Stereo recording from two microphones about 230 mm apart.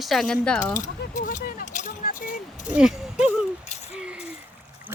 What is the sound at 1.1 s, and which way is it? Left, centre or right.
Keys jangling, left.